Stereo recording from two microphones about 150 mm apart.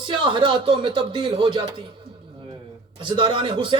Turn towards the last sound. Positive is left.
turn(degrees=-35)  # may be behind; listen again after turning